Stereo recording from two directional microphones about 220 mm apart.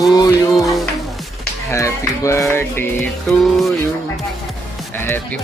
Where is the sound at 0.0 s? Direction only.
15° left (ahead or behind).